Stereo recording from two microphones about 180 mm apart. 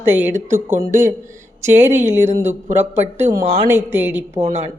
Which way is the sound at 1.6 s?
15° right (ahead or behind).